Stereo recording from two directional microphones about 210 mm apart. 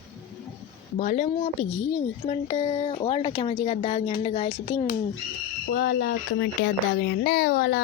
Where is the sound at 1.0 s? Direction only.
35° left (ahead or behind).